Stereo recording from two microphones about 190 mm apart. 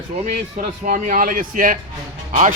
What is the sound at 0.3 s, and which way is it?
A man's voice, 45° right (ahead or behind).